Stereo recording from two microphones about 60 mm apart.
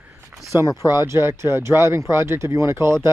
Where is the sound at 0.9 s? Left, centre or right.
Right.